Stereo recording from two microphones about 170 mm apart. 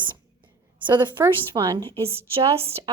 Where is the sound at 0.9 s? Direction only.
25° right (ahead or behind).